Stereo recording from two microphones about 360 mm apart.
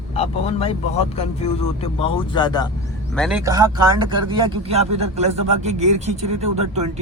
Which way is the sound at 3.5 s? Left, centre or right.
Centre.